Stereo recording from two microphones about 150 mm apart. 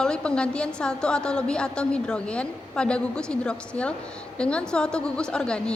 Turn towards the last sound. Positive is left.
turn(degrees=5)  # may be behind; listen again after turning